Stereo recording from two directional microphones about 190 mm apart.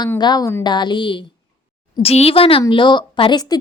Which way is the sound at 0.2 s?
20° left (ahead or behind).